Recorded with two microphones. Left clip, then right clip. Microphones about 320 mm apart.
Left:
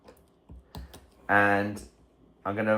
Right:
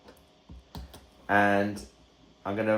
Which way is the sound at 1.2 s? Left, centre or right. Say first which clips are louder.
Left 1 dB; centre.